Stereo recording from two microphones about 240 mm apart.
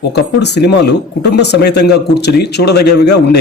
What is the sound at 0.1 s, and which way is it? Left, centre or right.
Speech, left.